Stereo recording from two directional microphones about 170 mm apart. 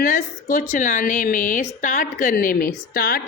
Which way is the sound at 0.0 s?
50° left (ahead or behind).